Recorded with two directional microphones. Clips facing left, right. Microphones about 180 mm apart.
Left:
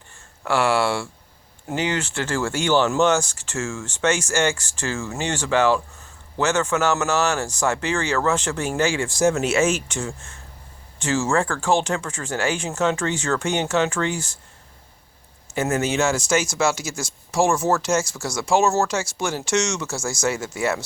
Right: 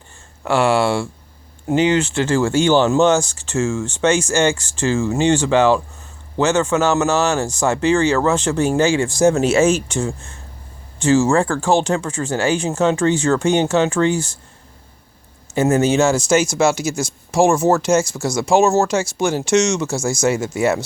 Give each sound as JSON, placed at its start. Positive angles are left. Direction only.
{"t": 0.4, "sound": "speech", "side_deg": -25}
{"t": 15.5, "sound": "speech", "side_deg": -30}